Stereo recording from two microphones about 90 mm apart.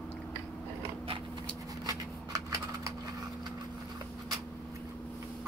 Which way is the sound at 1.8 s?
35° right (ahead or behind).